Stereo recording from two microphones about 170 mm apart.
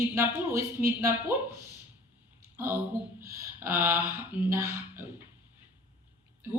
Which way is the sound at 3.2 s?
15° right (ahead or behind).